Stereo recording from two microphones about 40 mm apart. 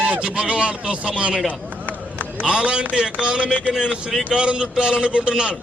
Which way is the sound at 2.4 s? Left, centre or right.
Right.